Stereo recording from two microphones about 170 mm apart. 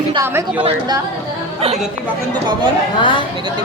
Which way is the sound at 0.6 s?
25° right (ahead or behind).